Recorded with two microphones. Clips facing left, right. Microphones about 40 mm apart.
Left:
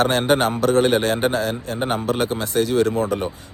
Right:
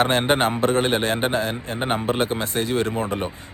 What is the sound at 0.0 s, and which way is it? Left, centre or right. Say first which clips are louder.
Speech: left 1 dB; right.